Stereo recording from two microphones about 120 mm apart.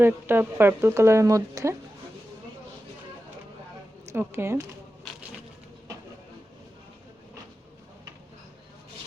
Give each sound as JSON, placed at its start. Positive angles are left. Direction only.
{"t": 0.0, "sound": "speech", "side_deg": -20}
{"t": 4.1, "sound": "speech", "side_deg": -20}